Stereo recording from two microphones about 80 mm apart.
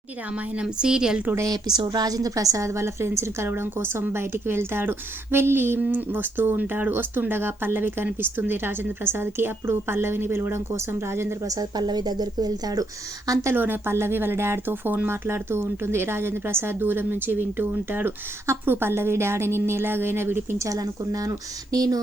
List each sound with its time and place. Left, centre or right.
0.3 s a woman's voice: centre
1.5 s a woman's voice: right
11.4 s speech: right
13.5 s speech: right
20.7 s speech: right